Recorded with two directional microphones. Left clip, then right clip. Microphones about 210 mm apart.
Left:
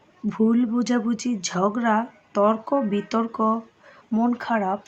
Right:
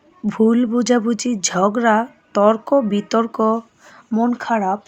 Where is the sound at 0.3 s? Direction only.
35° right (ahead or behind).